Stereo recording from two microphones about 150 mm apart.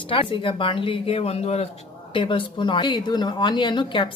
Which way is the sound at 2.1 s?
35° left (ahead or behind).